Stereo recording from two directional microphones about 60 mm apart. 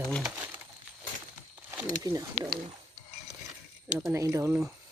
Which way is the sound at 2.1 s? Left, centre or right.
Right.